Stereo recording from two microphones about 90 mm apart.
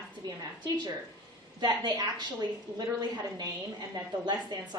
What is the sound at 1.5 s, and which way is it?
A woman's voice, 50° right (ahead or behind).